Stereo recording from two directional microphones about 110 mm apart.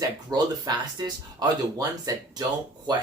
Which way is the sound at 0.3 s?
35° right (ahead or behind).